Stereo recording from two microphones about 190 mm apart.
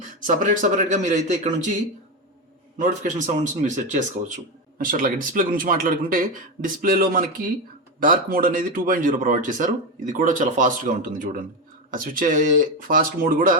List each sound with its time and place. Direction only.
0.5 s speech: 45° right (ahead or behind)
2.7 s a man's voice: 40° right (ahead or behind)